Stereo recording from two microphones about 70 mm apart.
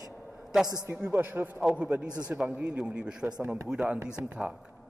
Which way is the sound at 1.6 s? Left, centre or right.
Centre.